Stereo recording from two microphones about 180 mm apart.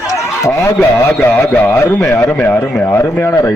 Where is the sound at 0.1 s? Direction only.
15° left (ahead or behind).